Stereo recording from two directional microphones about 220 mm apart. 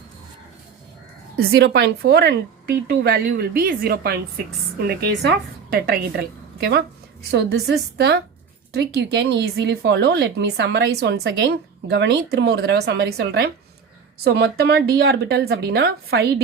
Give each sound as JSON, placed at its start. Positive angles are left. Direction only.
{"t": 1.4, "sound": "a woman's voice", "side_deg": -45}